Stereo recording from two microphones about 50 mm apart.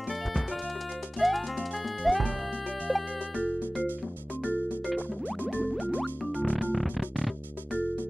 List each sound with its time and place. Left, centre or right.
1.2 s music: centre
5.9 s music: left